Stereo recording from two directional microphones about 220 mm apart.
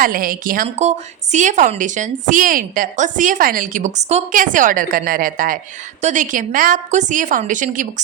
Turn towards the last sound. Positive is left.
turn(degrees=-35)  # may be behind; listen again after turning